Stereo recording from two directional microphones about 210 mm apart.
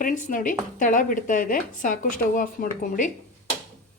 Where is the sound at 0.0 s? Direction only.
40° left (ahead or behind).